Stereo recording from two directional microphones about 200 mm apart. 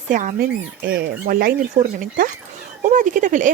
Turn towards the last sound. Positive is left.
turn(degrees=-40)  # may be behind; listen again after turning